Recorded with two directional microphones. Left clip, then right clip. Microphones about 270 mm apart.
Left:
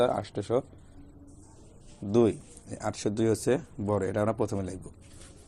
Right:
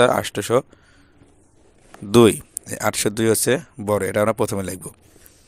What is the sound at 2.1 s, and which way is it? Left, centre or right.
Speech, right.